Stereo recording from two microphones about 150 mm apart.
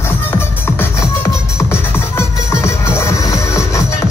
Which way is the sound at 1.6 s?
15° left (ahead or behind).